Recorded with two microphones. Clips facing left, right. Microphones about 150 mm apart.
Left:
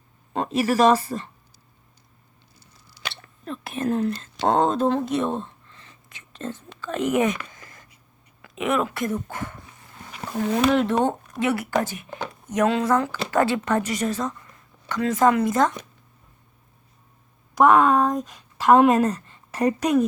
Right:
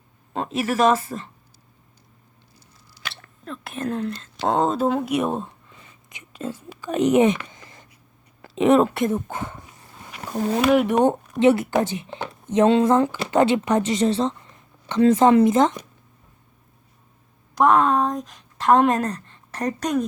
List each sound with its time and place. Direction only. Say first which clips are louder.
0.3 s speech: left 2 dB; centre (ahead or behind)
3.2 s speech: left 3 dB; 5° left (ahead or behind); by 9.6 s 20° right (ahead or behind)
10.6 s a woman's voice: right 3 dB; 10° right (ahead or behind)
17.6 s speech: left 1 dB; centre (ahead or behind)